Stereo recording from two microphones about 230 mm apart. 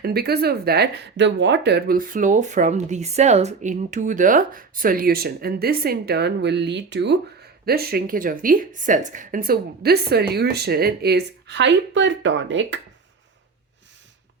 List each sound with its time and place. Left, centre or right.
0.0 s a woman's voice: right